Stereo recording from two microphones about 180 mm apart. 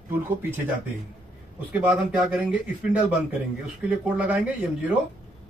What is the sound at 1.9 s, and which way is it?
Speech, 5° right (ahead or behind).